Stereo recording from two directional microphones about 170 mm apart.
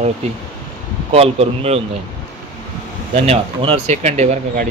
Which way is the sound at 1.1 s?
35° right (ahead or behind).